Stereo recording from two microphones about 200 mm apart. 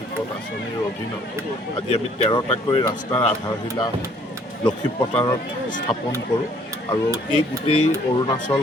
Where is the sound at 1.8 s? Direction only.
30° left (ahead or behind).